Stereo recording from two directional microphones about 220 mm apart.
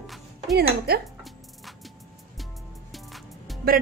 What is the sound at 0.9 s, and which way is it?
Speech, 45° right (ahead or behind).